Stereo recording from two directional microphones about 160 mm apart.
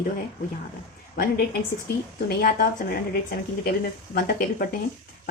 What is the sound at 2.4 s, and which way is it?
Speech, 65° left (ahead or behind).